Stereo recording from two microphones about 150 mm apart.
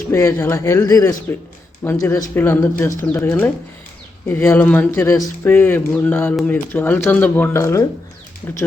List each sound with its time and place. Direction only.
0.1 s speech: 20° left (ahead or behind)